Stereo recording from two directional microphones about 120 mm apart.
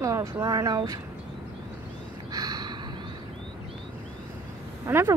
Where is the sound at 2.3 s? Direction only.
35° right (ahead or behind).